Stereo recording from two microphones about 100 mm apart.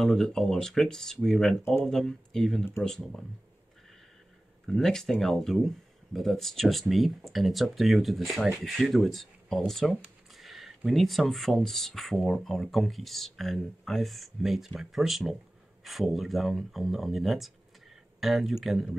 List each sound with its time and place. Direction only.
0.0 s speech: 5° left (ahead or behind)
4.6 s speech: 5° left (ahead or behind)
10.0 s a sound: centre (ahead or behind)
10.9 s speech: centre (ahead or behind)